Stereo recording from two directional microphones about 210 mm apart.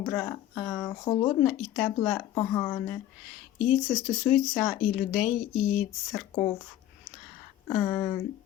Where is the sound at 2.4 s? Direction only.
15° left (ahead or behind).